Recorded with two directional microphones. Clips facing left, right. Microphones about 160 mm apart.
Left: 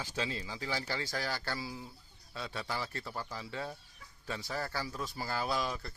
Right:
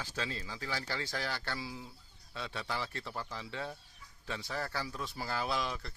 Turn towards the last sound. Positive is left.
turn(degrees=0)  # may be behind; listen again after turning